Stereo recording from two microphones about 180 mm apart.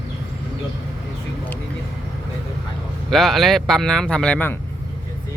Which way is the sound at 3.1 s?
Centre (ahead or behind).